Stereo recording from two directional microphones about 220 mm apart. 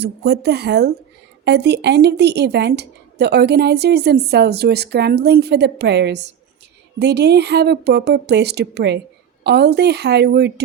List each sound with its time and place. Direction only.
0.0 s a woman's voice: 50° right (ahead or behind)